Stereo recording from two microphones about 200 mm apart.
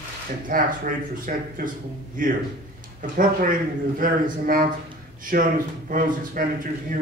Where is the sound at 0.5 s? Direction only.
45° right (ahead or behind).